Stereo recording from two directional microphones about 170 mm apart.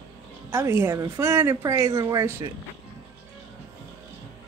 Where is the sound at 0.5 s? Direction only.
15° right (ahead or behind).